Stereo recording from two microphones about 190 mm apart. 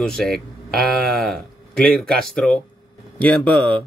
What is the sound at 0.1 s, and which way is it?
A man's voice, centre (ahead or behind).